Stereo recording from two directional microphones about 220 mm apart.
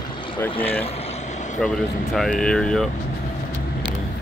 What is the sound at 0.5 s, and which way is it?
Speech, 25° left (ahead or behind).